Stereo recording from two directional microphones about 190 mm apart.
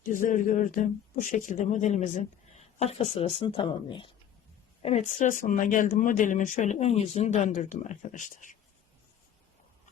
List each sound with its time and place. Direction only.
0.1 s speech: 45° left (ahead or behind)